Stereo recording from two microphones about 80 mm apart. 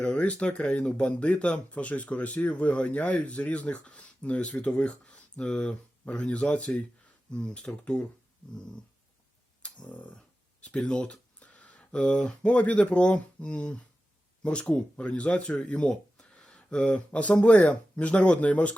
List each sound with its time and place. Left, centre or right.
0.0 s speech: centre
9.6 s speech: centre